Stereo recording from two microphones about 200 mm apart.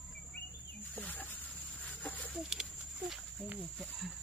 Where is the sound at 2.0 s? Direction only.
10° left (ahead or behind).